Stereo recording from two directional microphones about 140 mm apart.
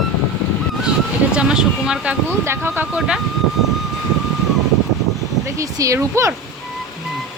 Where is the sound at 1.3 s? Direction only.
5° right (ahead or behind).